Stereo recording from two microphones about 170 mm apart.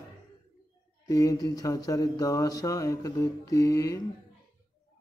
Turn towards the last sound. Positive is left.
turn(degrees=20)  # may be behind; listen again after turning